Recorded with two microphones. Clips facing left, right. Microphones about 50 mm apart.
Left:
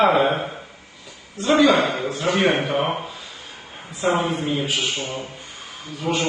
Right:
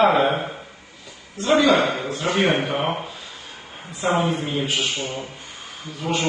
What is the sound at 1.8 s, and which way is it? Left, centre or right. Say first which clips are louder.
Speech: even; right.